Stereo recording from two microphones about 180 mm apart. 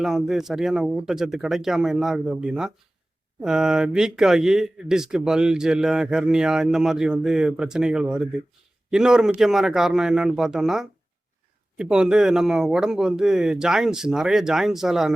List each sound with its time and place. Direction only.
0.0 s speech: centre (ahead or behind)